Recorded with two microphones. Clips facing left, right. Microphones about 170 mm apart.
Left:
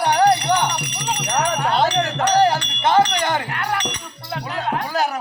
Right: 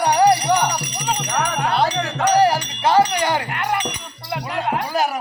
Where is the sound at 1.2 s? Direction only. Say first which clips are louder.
Left 4 dB; 30° left (ahead or behind).